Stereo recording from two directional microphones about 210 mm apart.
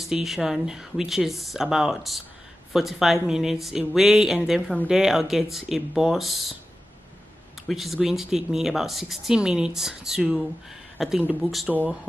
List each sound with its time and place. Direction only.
0.0 s speech: centre (ahead or behind)
7.6 s speech: centre (ahead or behind)